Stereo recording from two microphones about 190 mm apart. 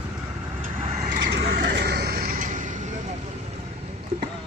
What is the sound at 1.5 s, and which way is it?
Vehicle, 60° right (ahead or behind).